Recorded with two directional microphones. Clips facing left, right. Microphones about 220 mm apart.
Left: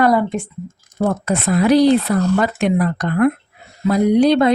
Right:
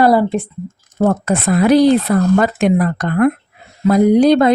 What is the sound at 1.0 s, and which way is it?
A woman's voice, 50° right (ahead or behind).